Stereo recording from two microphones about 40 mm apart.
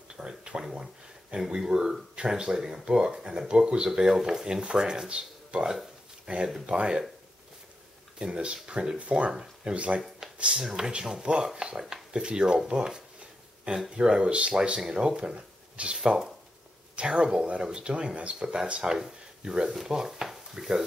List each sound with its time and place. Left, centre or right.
0.1 s speech: centre
8.2 s speech: right
9.8 s speech: right
10.6 s speech: centre
19.7 s speech: centre